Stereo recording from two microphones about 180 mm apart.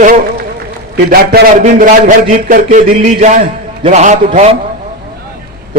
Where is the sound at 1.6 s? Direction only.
45° right (ahead or behind).